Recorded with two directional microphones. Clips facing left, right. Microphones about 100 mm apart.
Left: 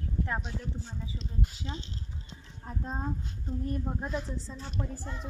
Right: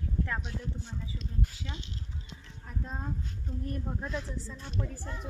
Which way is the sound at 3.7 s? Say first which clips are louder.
Left 2 dB; 20° left (ahead or behind).